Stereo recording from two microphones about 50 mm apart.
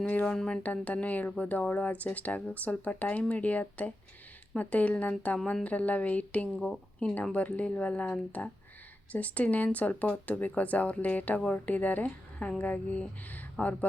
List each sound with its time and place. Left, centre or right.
0.1 s speech: left